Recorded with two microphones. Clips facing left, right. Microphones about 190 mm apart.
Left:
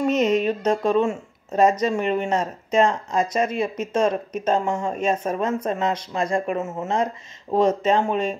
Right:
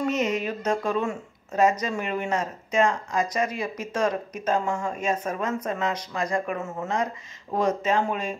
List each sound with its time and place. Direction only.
0.3 s speech: 30° left (ahead or behind)